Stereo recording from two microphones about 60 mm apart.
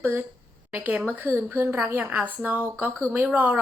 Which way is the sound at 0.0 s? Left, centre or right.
Right.